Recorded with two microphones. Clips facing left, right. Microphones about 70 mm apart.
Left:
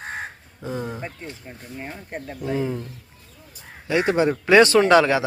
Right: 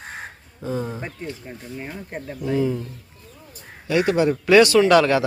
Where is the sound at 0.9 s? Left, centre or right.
Centre.